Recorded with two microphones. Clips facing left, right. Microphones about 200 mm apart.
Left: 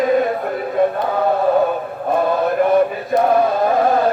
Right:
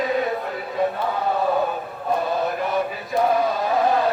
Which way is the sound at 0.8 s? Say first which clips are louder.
Left 6 dB; 55° left (ahead or behind).